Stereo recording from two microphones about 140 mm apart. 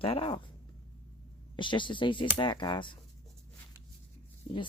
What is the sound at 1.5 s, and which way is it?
Speech, 35° left (ahead or behind).